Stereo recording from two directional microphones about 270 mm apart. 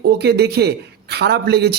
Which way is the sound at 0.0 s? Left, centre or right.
Right.